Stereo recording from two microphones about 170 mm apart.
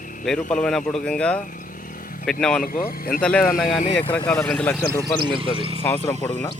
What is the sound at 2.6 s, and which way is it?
Speech, 55° left (ahead or behind).